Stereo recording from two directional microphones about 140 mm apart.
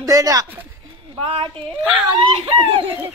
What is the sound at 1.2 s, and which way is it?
A woman's voice, 40° right (ahead or behind).